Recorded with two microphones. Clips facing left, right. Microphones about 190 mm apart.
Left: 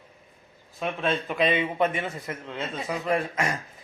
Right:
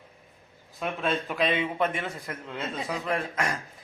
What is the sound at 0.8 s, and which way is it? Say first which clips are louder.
Speech: left 1 dB; centre (ahead or behind).